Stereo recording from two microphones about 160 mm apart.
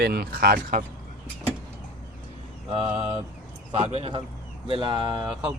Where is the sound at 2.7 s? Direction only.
35° right (ahead or behind).